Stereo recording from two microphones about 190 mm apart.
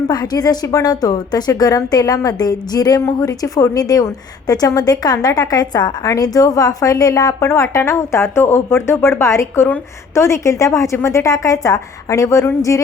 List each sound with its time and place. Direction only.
0.1 s a woman's voice: 20° left (ahead or behind)